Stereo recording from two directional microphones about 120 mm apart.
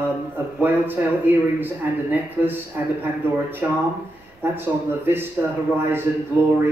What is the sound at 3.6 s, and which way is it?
A man's voice, 15° right (ahead or behind).